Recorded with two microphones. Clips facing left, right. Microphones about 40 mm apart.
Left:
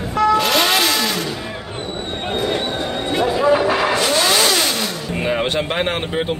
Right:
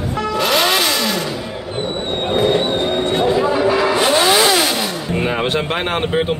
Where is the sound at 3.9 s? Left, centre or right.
Right; by 6.1 s centre.